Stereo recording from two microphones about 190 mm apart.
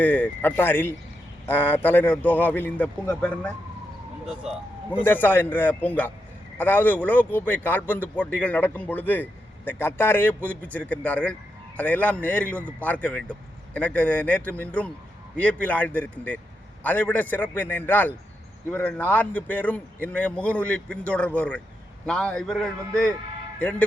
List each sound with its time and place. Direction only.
0.0 s a man's voice: 10° left (ahead or behind)
5.0 s a man's voice: 10° left (ahead or behind)